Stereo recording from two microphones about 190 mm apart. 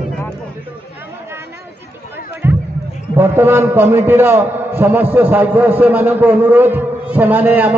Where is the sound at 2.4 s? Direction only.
10° right (ahead or behind).